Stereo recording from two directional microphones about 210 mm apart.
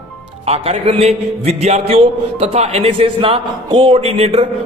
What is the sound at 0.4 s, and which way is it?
A man's voice, 30° right (ahead or behind).